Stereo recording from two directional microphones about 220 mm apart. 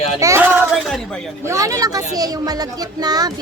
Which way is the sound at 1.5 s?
15° right (ahead or behind).